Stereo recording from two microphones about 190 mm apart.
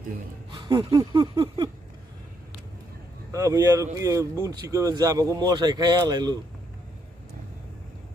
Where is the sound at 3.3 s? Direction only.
15° right (ahead or behind).